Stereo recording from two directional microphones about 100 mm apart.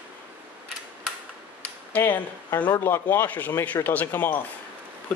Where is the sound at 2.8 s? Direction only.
20° left (ahead or behind).